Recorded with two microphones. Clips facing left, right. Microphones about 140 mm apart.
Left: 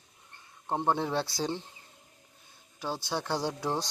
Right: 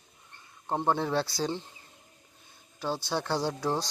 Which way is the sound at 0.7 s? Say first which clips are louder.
Right 1 dB; 15° left (ahead or behind).